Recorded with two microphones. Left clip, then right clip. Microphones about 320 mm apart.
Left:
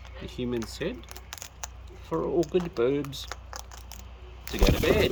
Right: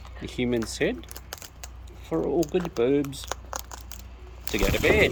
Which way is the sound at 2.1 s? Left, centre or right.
Centre.